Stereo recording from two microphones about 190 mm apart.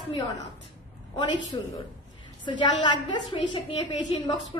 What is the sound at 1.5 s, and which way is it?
A woman's voice, 20° left (ahead or behind).